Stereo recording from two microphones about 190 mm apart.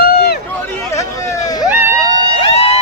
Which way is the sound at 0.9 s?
15° left (ahead or behind).